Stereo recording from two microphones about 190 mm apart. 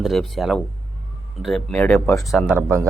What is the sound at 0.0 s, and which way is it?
Speech, centre (ahead or behind).